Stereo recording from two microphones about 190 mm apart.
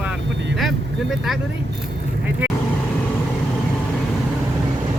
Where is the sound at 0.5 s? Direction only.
Centre (ahead or behind).